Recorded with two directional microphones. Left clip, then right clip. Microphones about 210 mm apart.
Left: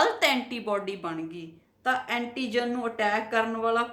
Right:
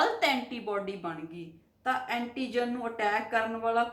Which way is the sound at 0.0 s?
50° left (ahead or behind).